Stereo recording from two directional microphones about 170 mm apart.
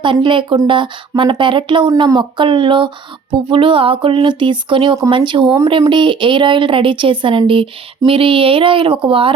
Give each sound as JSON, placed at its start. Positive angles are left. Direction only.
{"t": 0.0, "sound": "speech", "side_deg": -30}